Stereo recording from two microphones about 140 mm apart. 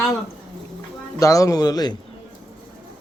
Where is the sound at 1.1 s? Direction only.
25° left (ahead or behind).